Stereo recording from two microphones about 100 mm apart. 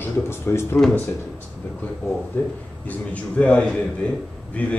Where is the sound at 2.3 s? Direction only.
20° left (ahead or behind).